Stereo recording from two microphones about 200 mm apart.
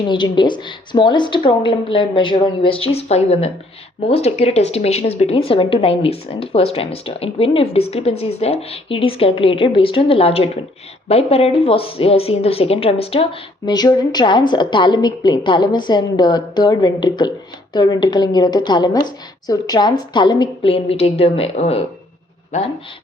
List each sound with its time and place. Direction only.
0.1 s a woman's voice: 20° left (ahead or behind)